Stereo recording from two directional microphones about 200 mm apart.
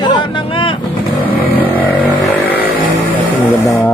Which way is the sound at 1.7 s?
10° left (ahead or behind).